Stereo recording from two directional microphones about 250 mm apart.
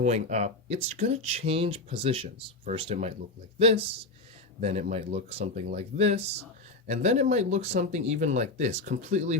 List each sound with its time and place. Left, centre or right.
0.0 s speech: right